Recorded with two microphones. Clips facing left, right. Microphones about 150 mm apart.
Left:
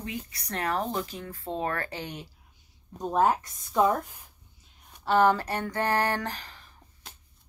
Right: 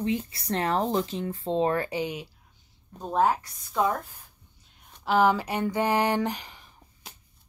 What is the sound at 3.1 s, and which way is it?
Speech, 15° left (ahead or behind).